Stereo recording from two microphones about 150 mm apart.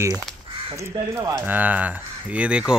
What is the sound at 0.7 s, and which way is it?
Speech, 20° right (ahead or behind).